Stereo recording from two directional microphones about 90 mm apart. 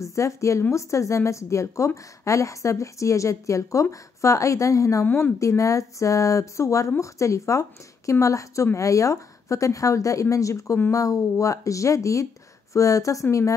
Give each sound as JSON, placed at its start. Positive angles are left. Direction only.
{"t": 0.0, "sound": "a woman's voice", "side_deg": 35}
{"t": 5.0, "sound": "a woman's voice", "side_deg": 25}